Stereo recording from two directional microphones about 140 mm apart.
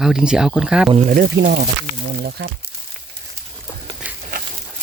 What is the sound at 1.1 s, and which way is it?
Speech, 80° right.